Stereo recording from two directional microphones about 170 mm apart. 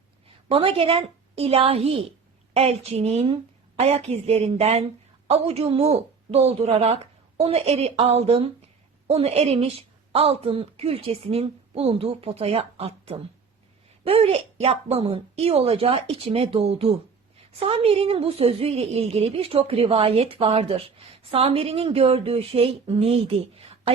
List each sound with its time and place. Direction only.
0.4 s a woman's voice: 35° right (ahead or behind)